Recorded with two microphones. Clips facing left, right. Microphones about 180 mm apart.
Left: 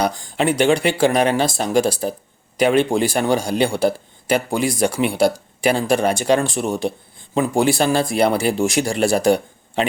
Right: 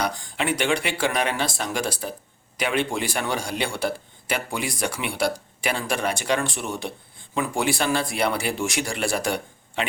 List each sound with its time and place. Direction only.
0.0 s speech: 35° left (ahead or behind)